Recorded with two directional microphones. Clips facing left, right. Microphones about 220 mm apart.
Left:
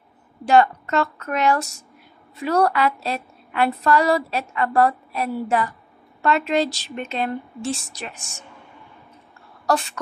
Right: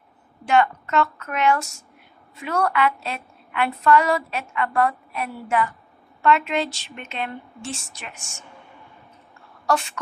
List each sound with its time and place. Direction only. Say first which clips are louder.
0.5 s a woman's voice: left 3 dB; 35° left (ahead or behind)